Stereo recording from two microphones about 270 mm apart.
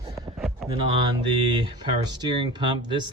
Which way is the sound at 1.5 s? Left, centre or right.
Centre.